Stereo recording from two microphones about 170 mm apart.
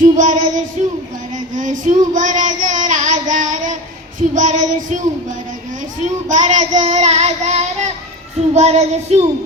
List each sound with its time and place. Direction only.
0.0 s music: 50° right (ahead or behind)
1.3 s a sound: 50° right (ahead or behind)
4.2 s child singing: 50° right (ahead or behind)
6.2 s child singing: 45° right (ahead or behind)